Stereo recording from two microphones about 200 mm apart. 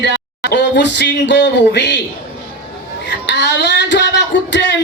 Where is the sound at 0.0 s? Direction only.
55° left (ahead or behind).